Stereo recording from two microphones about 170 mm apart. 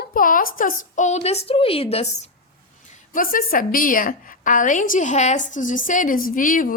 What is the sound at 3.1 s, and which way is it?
A woman's voice, 55° left (ahead or behind).